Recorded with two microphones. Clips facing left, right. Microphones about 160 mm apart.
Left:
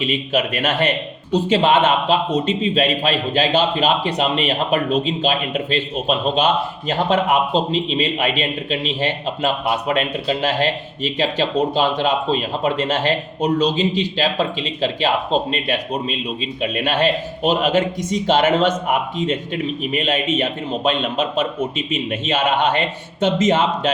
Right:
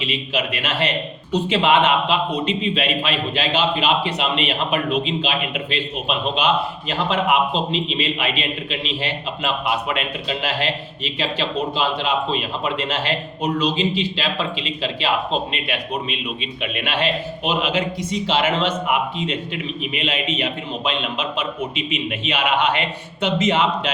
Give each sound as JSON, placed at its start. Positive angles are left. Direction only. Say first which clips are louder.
{"t": 0.0, "sound": "a man's voice", "louder": "left 4 dB", "side_deg": 50}